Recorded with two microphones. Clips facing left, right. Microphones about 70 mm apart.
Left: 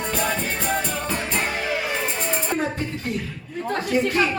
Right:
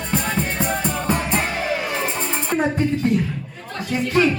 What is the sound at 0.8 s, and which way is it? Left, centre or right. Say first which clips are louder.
Music: right 4 dB; right.